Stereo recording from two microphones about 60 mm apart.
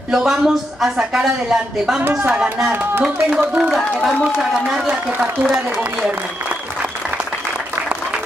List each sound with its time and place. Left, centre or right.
0.1 s speech: centre
2.0 s speech: right
3.0 s speech: centre
4.4 s speech: centre